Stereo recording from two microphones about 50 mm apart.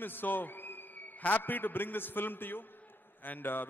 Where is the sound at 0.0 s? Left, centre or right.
Left.